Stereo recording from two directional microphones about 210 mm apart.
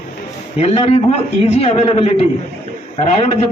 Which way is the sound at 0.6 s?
30° left (ahead or behind).